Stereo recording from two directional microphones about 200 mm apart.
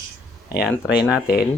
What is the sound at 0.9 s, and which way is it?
Speech, 5° right (ahead or behind).